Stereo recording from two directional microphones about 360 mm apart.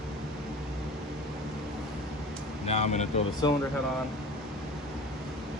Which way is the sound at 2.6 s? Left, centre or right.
Centre.